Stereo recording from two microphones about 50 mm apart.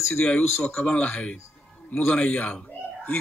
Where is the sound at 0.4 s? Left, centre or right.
Left.